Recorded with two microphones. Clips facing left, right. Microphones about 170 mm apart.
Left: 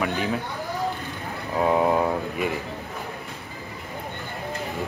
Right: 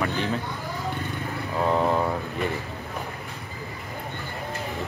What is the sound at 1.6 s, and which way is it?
Speech, 10° left (ahead or behind).